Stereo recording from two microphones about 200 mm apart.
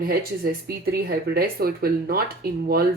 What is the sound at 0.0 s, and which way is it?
Speech, 50° right (ahead or behind).